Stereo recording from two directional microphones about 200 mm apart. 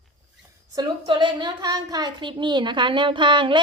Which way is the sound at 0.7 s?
25° right (ahead or behind).